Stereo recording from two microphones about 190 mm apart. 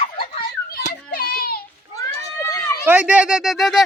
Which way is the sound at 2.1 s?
20° left (ahead or behind).